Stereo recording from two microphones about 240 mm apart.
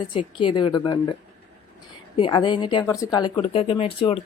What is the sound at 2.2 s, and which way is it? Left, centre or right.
A woman's voice, centre.